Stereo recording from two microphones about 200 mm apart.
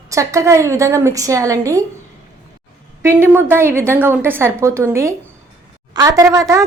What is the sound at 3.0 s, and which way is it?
A woman's voice, 10° right (ahead or behind).